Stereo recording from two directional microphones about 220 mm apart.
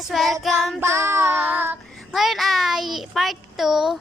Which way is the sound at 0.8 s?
10° right (ahead or behind).